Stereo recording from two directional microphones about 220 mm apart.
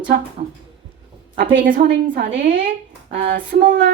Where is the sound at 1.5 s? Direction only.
40° right (ahead or behind).